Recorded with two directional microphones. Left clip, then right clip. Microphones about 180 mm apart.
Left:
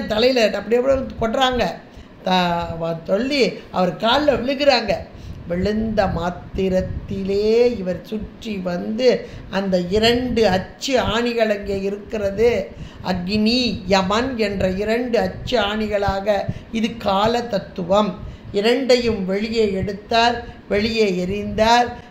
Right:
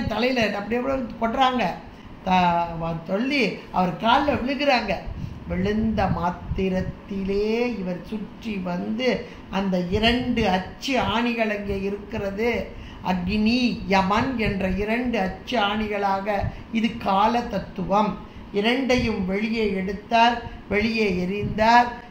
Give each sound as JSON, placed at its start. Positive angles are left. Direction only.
{"t": 0.1, "sound": "a woman's voice", "side_deg": 55}